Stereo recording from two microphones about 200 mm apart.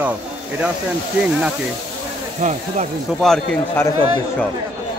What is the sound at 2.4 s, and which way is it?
Speech, 40° right (ahead or behind).